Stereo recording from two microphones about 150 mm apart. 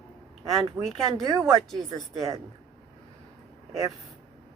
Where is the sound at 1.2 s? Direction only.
30° right (ahead or behind).